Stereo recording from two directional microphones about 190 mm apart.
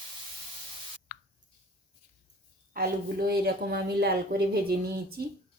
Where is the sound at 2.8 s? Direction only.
55° right (ahead or behind).